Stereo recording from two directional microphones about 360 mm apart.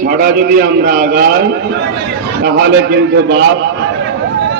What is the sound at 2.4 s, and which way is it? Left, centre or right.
Speech, right.